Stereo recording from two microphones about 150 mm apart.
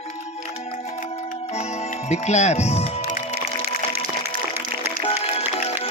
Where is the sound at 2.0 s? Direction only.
50° left (ahead or behind).